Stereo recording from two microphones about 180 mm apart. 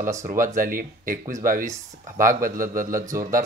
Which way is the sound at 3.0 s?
15° right (ahead or behind).